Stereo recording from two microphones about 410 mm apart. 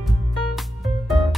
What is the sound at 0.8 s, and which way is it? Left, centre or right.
Music, centre.